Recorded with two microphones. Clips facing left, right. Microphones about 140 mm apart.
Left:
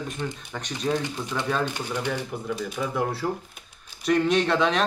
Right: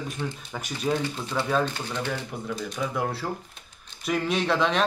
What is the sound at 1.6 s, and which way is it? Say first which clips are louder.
Speech: left 2 dB; 15° left (ahead or behind).